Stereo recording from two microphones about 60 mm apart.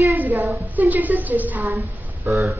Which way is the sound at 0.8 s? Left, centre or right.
Right.